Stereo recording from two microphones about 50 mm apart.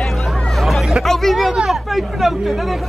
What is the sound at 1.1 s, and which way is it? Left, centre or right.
Speech, centre.